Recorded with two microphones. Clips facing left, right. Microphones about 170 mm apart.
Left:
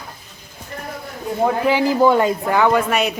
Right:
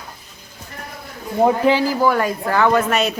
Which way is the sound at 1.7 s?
20° left (ahead or behind).